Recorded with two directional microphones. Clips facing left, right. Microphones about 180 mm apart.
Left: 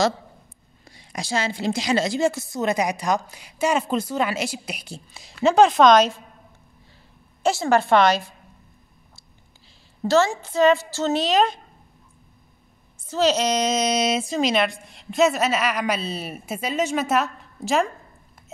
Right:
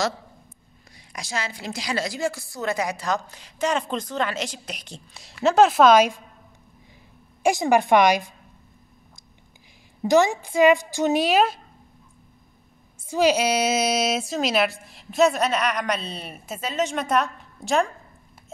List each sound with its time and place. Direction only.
0.8 s a woman's voice: 25° left (ahead or behind); by 6.2 s 10° right (ahead or behind)
7.4 s a woman's voice: 15° right (ahead or behind)
10.0 s a woman's voice: 15° right (ahead or behind)
13.0 s a woman's voice: 10° right (ahead or behind)